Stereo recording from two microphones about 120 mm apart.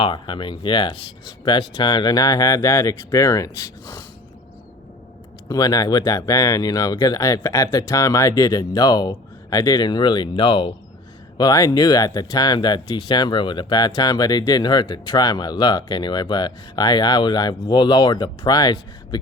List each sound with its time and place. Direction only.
0.0 s speech: 45° left (ahead or behind); by 4.0 s 25° left (ahead or behind)
5.5 s speech: 30° left (ahead or behind)
11.3 s speech: 30° left (ahead or behind)